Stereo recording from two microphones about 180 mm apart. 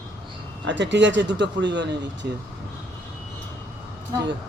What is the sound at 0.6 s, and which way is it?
Speech, 85° right.